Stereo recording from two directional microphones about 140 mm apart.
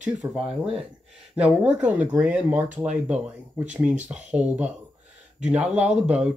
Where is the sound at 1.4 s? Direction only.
10° right (ahead or behind).